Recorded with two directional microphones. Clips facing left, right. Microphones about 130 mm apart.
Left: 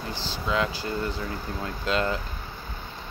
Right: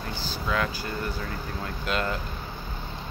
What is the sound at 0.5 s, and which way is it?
Speech, 25° left (ahead or behind).